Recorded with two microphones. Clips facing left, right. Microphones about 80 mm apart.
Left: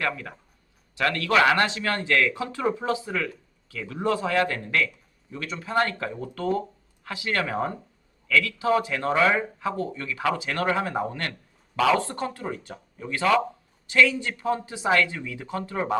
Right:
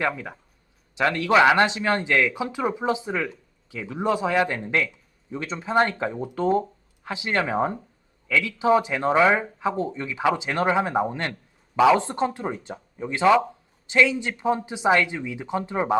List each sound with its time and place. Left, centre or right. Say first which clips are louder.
0.0 s speech: right 3 dB; right